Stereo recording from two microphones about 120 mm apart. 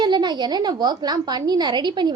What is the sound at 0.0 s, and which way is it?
A woman's voice, 35° right (ahead or behind).